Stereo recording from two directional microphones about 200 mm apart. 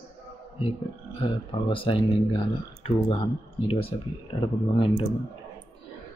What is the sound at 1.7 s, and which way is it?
Speech, 25° left (ahead or behind).